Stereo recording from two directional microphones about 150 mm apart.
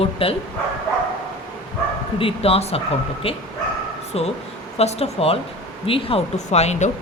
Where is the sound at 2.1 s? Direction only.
40° left (ahead or behind).